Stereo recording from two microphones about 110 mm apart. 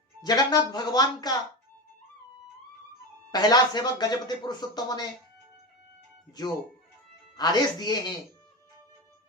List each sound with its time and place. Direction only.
0.2 s speech: 40° left (ahead or behind)
3.3 s speech: 40° left (ahead or behind)
7.3 s speech: 40° left (ahead or behind)